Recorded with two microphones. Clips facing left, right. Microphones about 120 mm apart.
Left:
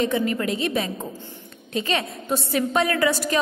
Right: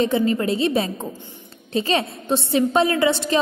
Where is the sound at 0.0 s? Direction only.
30° right (ahead or behind).